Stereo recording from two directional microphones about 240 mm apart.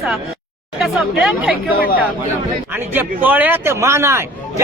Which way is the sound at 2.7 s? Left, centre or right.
Centre.